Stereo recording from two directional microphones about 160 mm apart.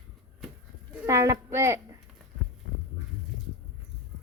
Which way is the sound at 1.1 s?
20° right (ahead or behind).